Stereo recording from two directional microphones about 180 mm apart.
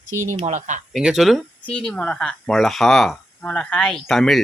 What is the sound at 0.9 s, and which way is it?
Speech, centre (ahead or behind).